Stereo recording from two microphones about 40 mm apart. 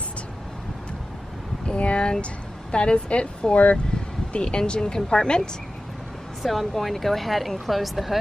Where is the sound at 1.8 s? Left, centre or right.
Left.